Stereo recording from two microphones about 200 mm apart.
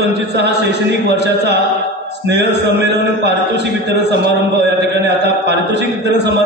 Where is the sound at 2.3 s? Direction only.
55° right (ahead or behind).